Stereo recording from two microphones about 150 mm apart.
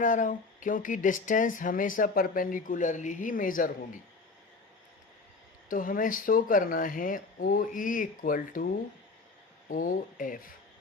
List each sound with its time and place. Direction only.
0.0 s speech: 60° left (ahead or behind)
5.6 s speech: 65° left (ahead or behind)
9.6 s speech: 65° left (ahead or behind)